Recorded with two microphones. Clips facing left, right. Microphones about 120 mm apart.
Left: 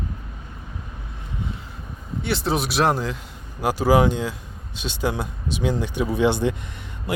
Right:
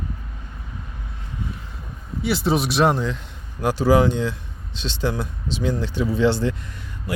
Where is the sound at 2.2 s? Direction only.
Centre (ahead or behind).